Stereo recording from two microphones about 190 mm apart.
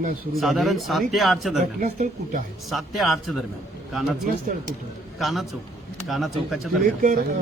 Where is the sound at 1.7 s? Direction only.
40° right (ahead or behind).